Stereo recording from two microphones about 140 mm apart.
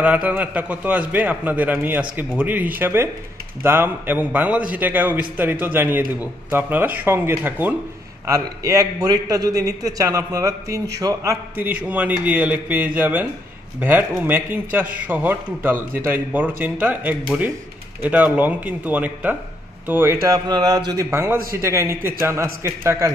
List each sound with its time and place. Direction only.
0.0 s a man's voice: 10° right (ahead or behind)
11.5 s a man's voice: 15° right (ahead or behind)